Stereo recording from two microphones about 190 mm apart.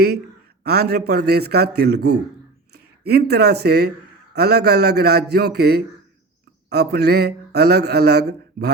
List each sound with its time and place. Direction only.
0.6 s speech: 55° right (ahead or behind)